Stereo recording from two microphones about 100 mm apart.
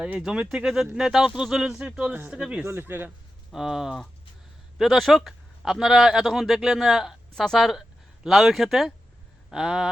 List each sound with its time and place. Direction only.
0.0 s speech: 5° right (ahead or behind)
2.6 s speech: 20° right (ahead or behind)
3.5 s speech: 5° right (ahead or behind)